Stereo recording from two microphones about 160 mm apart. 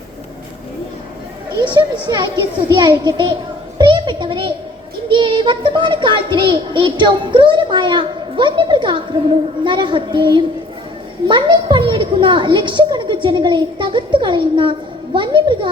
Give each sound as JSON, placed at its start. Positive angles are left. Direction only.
{"t": 1.6, "sound": "a child's voice", "side_deg": -30}
{"t": 3.8, "sound": "a sound", "side_deg": -30}
{"t": 5.0, "sound": "a child's voice", "side_deg": -30}